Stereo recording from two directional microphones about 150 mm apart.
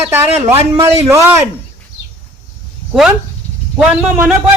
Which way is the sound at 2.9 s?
5° right (ahead or behind).